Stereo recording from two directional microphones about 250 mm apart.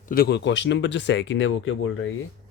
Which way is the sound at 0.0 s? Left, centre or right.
Left.